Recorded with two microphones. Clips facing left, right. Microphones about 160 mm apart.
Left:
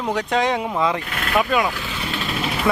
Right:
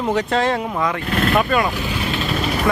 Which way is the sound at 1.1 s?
35° right (ahead or behind).